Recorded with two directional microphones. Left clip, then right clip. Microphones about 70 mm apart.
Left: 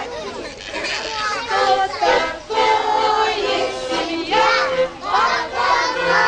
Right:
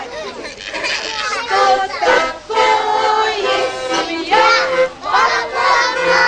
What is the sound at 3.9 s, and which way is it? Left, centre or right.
Music, right.